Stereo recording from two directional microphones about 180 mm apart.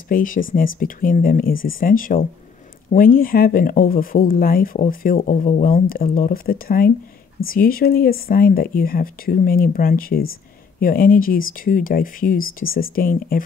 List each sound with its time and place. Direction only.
0.1 s speech: 50° left (ahead or behind)